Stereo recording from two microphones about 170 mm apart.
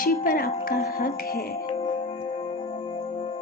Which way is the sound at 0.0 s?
60° left (ahead or behind).